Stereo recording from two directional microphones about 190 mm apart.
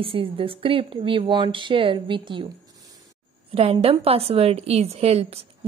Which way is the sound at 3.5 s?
30° right (ahead or behind).